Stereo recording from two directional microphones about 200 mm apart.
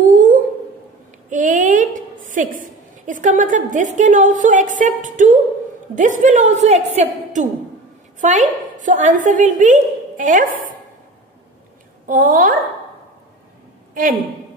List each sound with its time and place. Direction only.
0.1 s a sound: 40° right (ahead or behind)
1.3 s a woman's voice: 40° right (ahead or behind)
12.1 s a woman's voice: 45° right (ahead or behind)